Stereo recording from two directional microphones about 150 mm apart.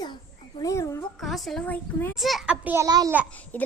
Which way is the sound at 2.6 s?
20° right (ahead or behind).